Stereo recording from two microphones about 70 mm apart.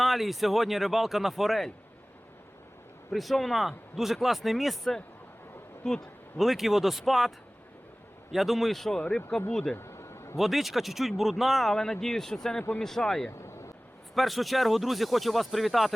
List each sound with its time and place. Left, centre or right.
0.0 s speech: centre
3.1 s speech: centre
9.7 s a sound: left
10.3 s speech: centre